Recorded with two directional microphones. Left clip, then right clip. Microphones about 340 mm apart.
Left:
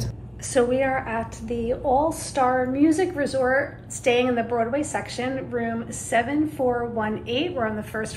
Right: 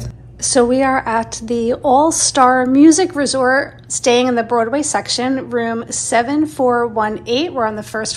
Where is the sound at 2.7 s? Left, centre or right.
Centre.